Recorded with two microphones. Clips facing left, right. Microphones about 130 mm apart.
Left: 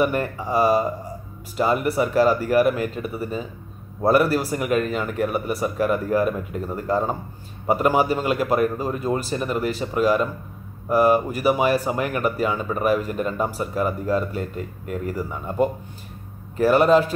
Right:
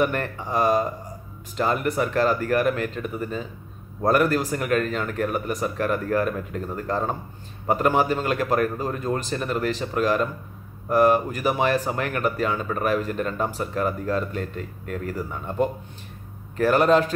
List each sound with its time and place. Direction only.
0.0 s a man's voice: 10° left (ahead or behind)